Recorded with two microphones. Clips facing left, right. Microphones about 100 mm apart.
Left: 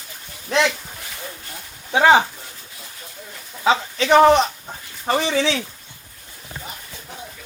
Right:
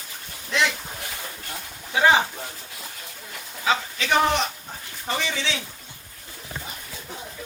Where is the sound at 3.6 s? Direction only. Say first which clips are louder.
Left 6 dB; 35° left (ahead or behind).